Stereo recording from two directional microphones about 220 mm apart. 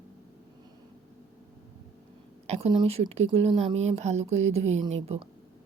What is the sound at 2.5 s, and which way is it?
Speech, 25° right (ahead or behind).